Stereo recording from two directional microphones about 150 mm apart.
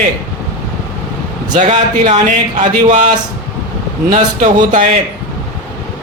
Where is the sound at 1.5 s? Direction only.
55° right (ahead or behind).